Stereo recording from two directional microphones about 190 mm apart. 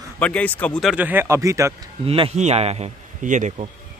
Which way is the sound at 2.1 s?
30° right (ahead or behind).